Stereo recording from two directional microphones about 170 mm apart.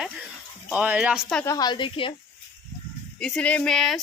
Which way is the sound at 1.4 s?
20° left (ahead or behind).